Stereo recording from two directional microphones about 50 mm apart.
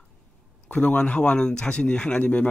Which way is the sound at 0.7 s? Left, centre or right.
Left.